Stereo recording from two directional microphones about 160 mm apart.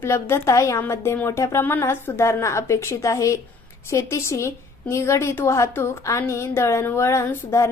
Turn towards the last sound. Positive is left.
turn(degrees=15)  # may be behind; listen again after turning